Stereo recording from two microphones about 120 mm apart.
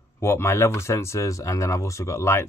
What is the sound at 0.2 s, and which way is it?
Speech, 20° left (ahead or behind).